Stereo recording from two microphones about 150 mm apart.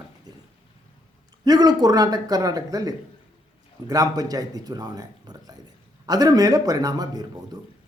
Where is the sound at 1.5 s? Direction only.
25° right (ahead or behind).